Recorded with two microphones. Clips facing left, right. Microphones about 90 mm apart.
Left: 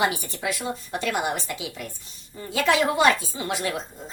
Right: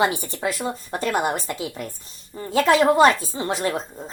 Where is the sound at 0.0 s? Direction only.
35° right (ahead or behind).